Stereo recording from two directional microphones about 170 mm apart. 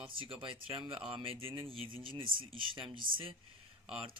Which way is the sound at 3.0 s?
55° right (ahead or behind).